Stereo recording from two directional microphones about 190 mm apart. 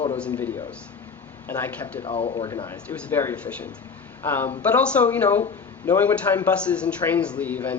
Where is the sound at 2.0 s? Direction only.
30° left (ahead or behind).